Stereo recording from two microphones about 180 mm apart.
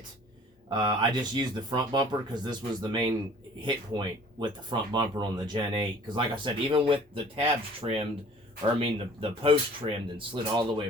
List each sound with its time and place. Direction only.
0.7 s speech: 25° right (ahead or behind)